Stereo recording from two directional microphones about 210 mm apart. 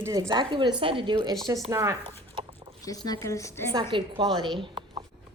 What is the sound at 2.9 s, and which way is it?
Speech, 20° left (ahead or behind).